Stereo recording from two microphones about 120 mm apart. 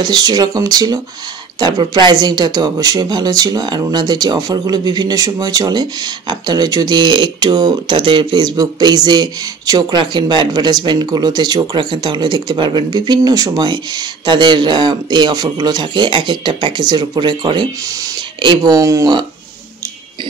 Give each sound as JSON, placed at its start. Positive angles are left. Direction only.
{"t": 0.0, "sound": "speech", "side_deg": -35}